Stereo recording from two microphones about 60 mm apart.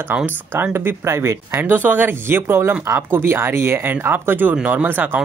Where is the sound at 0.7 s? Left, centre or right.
Right.